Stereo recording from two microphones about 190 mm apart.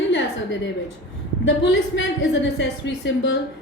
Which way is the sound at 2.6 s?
70° left (ahead or behind).